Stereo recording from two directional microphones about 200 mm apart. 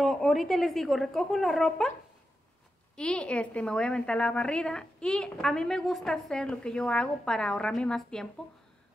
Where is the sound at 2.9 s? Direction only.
5° left (ahead or behind).